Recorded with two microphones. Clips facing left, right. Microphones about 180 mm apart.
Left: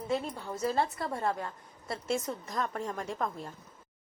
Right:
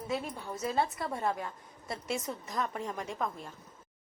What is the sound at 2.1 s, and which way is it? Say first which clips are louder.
A woman's voice: left 4 dB; centre (ahead or behind).